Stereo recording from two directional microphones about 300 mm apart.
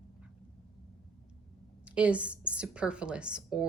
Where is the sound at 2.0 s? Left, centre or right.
Centre.